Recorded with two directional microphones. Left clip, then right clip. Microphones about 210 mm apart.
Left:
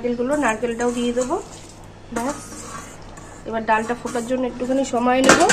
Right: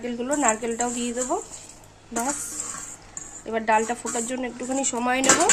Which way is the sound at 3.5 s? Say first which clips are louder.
Left 2 dB; 65° right (ahead or behind).